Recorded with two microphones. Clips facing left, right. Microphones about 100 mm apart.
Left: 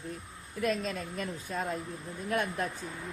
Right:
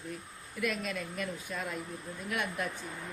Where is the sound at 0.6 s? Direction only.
35° left (ahead or behind).